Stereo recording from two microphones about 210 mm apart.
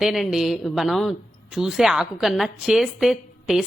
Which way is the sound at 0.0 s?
Centre (ahead or behind).